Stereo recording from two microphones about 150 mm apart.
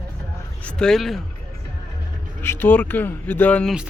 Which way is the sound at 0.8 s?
5° left (ahead or behind).